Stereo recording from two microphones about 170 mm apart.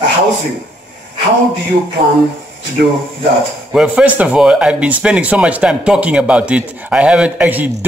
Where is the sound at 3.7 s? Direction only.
10° right (ahead or behind).